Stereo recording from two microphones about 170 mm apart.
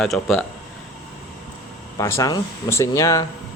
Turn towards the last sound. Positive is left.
turn(degrees=20)  # may be behind; listen again after turning